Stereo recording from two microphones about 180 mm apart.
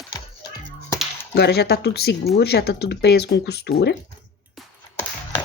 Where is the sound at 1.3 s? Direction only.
65° left (ahead or behind).